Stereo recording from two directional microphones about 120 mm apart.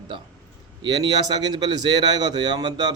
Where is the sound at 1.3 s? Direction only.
35° right (ahead or behind).